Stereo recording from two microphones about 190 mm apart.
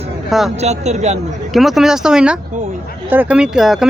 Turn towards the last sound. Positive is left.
turn(degrees=0)  # may be behind; listen again after turning